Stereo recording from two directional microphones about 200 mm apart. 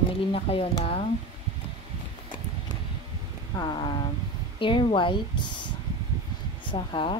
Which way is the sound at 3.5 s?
20° left (ahead or behind).